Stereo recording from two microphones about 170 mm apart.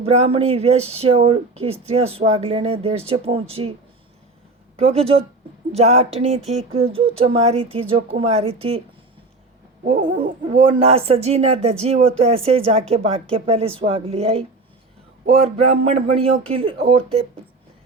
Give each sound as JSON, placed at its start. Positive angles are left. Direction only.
{"t": 0.0, "sound": "speech", "side_deg": -35}
{"t": 4.8, "sound": "speech", "side_deg": -35}
{"t": 9.8, "sound": "a sound", "side_deg": -55}
{"t": 10.7, "sound": "speech", "side_deg": -35}
{"t": 15.7, "sound": "speech", "side_deg": -35}